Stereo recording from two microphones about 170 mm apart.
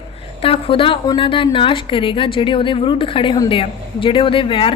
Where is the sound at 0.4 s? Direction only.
30° left (ahead or behind).